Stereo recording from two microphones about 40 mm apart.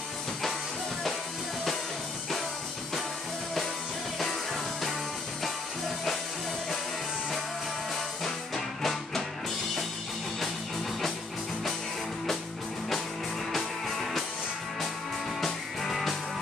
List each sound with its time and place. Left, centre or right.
8.2 s music: centre
13.5 s music: centre
15.4 s music: centre